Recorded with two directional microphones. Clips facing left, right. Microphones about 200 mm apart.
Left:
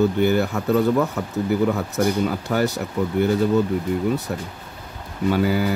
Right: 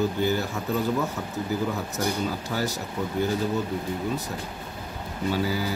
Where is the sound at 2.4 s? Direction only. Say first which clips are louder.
Left 7 dB; 60° left (ahead or behind).